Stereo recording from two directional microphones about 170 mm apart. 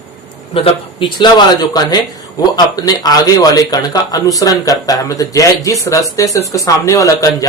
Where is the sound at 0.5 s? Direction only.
30° left (ahead or behind).